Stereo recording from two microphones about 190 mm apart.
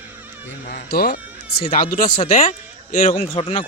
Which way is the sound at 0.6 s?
55° left (ahead or behind).